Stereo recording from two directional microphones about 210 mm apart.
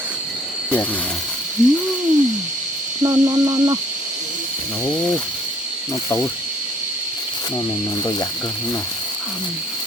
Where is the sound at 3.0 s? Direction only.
15° right (ahead or behind).